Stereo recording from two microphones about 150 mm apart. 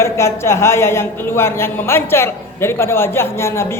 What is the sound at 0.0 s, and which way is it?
A woman's voice, 15° left (ahead or behind).